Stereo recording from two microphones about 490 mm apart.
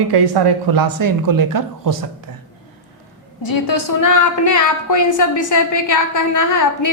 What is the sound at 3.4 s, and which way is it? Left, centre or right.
A woman's voice, left.